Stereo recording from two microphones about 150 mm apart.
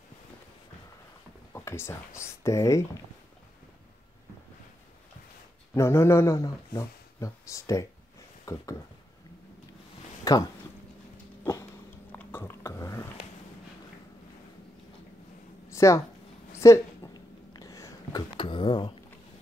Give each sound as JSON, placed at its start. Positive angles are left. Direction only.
{"t": 1.5, "sound": "speech", "side_deg": 15}
{"t": 5.8, "sound": "speech", "side_deg": 15}
{"t": 10.2, "sound": "speech", "side_deg": 25}
{"t": 12.1, "sound": "a sound", "side_deg": 15}
{"t": 15.7, "sound": "a sound", "side_deg": 20}
{"t": 18.4, "sound": "speech", "side_deg": 35}